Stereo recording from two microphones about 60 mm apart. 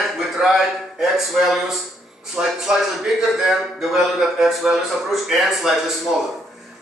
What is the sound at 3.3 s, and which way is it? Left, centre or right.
A man's voice, centre.